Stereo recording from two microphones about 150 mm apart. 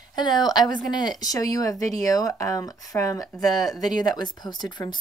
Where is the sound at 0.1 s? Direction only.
30° left (ahead or behind).